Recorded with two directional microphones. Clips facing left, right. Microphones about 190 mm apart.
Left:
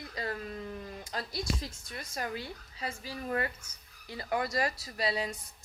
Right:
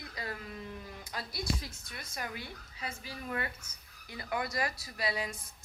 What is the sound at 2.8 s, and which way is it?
A woman's voice, 35° left (ahead or behind).